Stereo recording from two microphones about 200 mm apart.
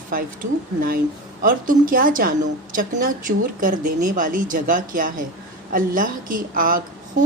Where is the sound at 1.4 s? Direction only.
45° right (ahead or behind).